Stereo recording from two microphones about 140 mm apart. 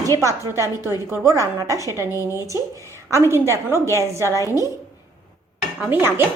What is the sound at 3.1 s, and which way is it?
A woman's voice, 20° right (ahead or behind).